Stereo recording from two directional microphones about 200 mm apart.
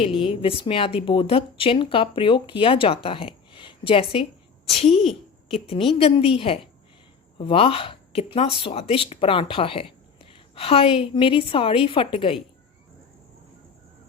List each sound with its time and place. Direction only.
0.0 s a woman's voice: 25° left (ahead or behind)